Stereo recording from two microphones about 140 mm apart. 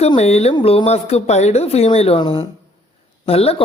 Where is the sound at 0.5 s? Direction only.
40° left (ahead or behind).